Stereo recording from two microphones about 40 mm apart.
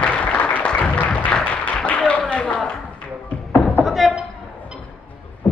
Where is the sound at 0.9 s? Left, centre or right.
Left.